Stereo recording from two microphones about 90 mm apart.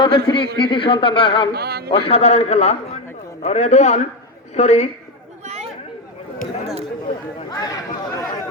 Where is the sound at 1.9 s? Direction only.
90° left.